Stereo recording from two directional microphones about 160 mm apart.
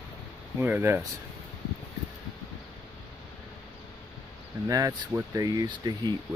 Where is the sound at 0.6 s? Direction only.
15° right (ahead or behind).